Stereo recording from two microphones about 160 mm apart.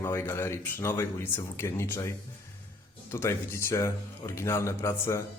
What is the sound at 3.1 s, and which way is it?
Speech, 15° left (ahead or behind).